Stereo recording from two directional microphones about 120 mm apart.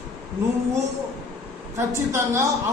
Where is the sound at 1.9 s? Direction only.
25° right (ahead or behind).